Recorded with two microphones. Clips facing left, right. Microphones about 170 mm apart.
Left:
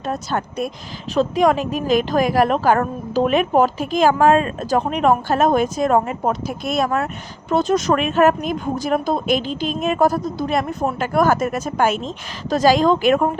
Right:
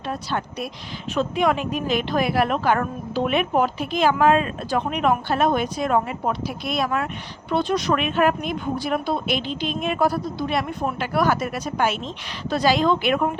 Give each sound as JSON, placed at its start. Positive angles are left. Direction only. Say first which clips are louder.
{"t": 0.0, "sound": "a woman's voice", "louder": "left 4 dB", "side_deg": 45}